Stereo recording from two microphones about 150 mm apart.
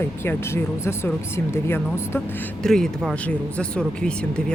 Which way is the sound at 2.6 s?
5° left (ahead or behind).